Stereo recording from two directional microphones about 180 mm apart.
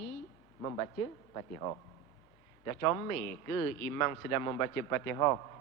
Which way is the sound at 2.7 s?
20° left (ahead or behind).